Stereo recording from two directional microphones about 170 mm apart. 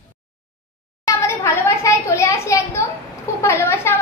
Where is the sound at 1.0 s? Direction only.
20° left (ahead or behind).